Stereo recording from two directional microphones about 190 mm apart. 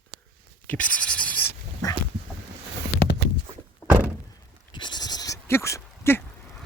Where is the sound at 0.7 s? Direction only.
5° left (ahead or behind).